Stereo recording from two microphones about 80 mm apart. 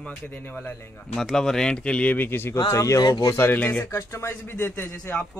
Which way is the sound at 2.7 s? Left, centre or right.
Left.